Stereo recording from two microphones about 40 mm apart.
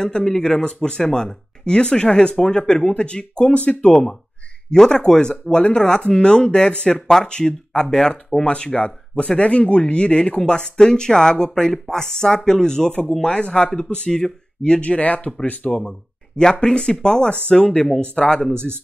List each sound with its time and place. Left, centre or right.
0.2 s speech: centre; by 3.9 s left
3.9 s speech: centre
14.6 s speech: left
16.5 s speech: left